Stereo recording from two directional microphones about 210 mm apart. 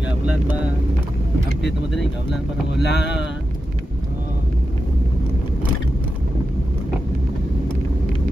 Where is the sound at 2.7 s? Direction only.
55° left (ahead or behind).